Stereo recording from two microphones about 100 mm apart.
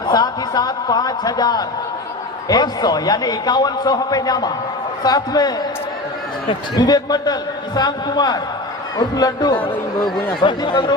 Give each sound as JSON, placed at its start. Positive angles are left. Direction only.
{"t": 0.0, "sound": "a man's voice", "side_deg": 45}
{"t": 6.7, "sound": "a man's voice", "side_deg": 40}
{"t": 10.4, "sound": "a man's voice", "side_deg": 55}